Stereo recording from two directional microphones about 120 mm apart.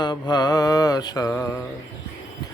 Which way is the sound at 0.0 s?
35° left (ahead or behind).